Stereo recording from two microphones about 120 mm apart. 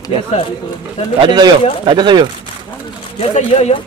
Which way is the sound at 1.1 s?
40° right (ahead or behind).